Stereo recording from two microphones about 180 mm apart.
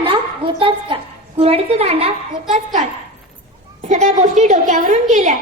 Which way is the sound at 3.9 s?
40° right (ahead or behind).